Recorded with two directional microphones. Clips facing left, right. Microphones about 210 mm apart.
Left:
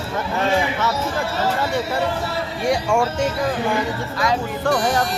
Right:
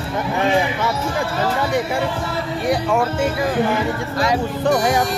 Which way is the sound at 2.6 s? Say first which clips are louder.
Even; centre (ahead or behind).